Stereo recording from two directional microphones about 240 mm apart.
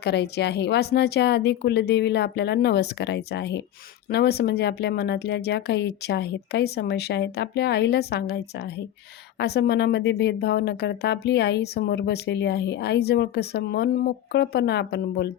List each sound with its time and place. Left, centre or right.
0.0 s speech: left